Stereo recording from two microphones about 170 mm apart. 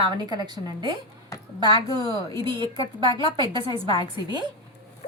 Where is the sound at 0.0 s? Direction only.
25° right (ahead or behind).